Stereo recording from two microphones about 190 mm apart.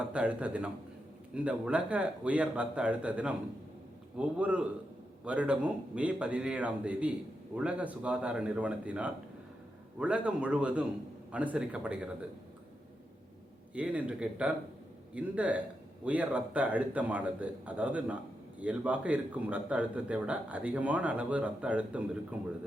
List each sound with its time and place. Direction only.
0.1 s a man's voice: 5° right (ahead or behind)
13.7 s a man's voice: 5° right (ahead or behind)